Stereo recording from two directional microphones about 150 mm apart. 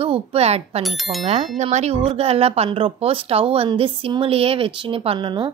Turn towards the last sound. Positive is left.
turn(degrees=-30)  # may be behind; listen again after turning